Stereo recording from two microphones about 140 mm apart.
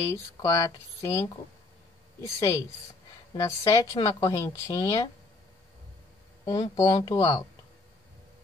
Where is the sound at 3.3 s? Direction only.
25° left (ahead or behind).